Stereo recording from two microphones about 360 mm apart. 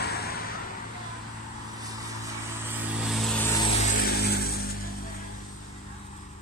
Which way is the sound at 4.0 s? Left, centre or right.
Left.